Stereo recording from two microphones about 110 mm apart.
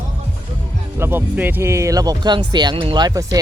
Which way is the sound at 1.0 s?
20° right (ahead or behind).